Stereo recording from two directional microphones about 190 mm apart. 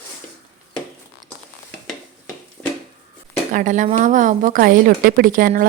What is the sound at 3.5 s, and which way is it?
A woman's voice, 40° right (ahead or behind).